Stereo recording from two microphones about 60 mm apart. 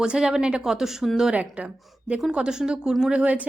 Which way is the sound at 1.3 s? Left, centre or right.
Centre.